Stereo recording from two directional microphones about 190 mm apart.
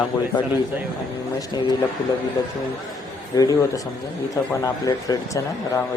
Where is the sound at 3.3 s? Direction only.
20° left (ahead or behind).